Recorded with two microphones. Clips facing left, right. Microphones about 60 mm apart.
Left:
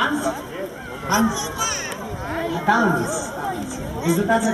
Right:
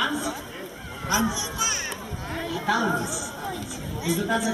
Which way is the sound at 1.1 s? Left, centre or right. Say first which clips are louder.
Left 5 dB; left.